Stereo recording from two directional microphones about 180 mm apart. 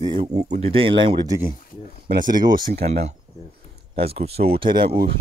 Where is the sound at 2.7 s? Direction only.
60° right (ahead or behind).